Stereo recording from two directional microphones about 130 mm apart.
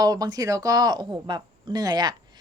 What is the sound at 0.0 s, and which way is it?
Speech, 30° right (ahead or behind).